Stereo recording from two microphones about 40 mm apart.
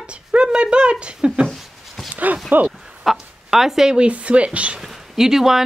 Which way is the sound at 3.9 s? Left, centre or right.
Right.